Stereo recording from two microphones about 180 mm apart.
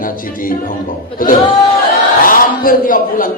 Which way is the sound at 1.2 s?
50° left (ahead or behind).